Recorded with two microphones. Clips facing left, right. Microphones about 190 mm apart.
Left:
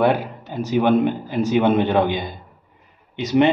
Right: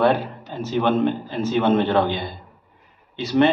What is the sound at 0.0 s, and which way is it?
A man's voice, 10° left (ahead or behind).